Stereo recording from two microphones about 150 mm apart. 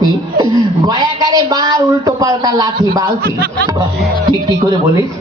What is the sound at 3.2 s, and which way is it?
Speech, 90° right.